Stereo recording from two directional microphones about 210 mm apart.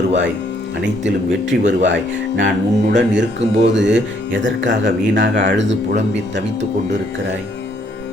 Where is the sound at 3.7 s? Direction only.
60° right (ahead or behind).